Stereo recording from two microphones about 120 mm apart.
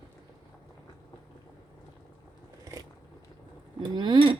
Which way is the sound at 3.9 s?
40° right (ahead or behind).